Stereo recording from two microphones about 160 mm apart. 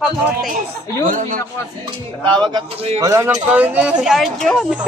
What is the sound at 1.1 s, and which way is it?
Speech, 55° right (ahead or behind).